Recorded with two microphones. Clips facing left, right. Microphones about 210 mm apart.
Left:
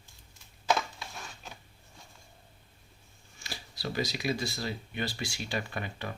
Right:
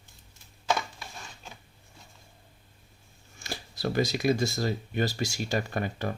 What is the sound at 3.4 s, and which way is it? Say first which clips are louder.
Speech: right 7 dB; 50° right (ahead or behind).